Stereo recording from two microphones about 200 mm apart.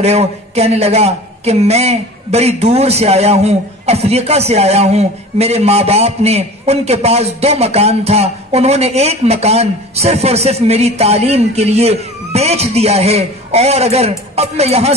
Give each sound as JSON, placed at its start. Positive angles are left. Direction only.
{"t": 0.0, "sound": "speech", "side_deg": -30}